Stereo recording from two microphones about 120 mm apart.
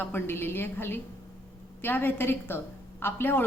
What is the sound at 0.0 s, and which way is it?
A woman's voice, 20° left (ahead or behind).